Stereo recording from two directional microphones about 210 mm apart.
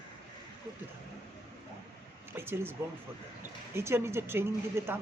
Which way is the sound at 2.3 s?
10° right (ahead or behind).